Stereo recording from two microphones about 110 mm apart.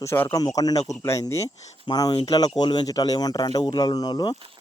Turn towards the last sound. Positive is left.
turn(degrees=40)  # may be behind; listen again after turning